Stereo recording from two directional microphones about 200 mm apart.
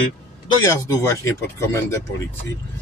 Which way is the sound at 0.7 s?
15° left (ahead or behind).